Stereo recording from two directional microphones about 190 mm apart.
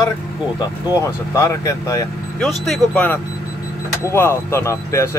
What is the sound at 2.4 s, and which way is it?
A man's voice, centre (ahead or behind).